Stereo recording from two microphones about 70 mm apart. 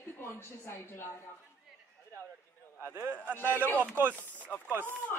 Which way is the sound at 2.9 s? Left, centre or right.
Right.